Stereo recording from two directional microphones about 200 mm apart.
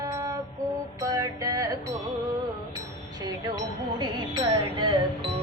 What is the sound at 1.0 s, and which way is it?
Music, 15° right (ahead or behind).